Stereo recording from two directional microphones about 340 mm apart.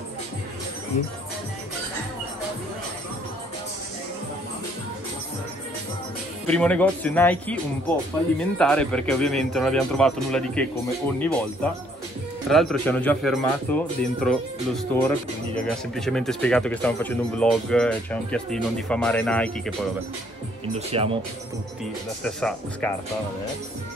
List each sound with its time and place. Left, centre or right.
6.4 s speech: centre
12.4 s speech: centre
20.6 s speech: centre
22.2 s speech: centre